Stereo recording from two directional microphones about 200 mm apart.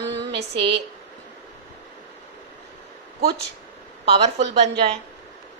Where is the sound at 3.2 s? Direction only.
50° right (ahead or behind).